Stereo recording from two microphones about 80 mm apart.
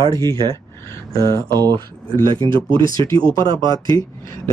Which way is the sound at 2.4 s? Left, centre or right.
Right.